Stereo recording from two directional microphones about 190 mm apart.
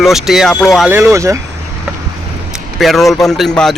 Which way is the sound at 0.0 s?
Centre (ahead or behind).